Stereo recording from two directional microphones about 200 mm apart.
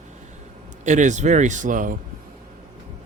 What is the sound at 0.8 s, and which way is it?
Speech, 35° right (ahead or behind).